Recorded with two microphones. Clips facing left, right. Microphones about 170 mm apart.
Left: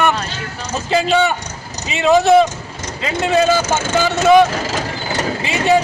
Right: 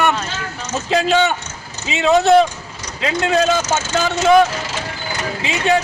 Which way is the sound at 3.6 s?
55° left (ahead or behind).